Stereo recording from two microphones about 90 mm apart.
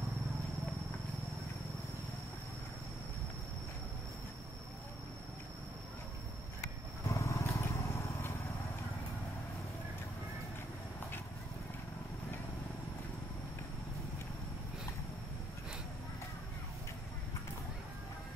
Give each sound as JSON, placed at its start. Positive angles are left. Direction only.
{"t": 7.1, "sound": "vehicle", "side_deg": 35}